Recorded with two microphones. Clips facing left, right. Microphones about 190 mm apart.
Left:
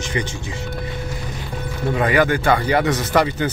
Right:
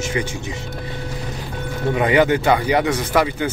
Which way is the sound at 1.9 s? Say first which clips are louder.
Right 2 dB; 20° right (ahead or behind).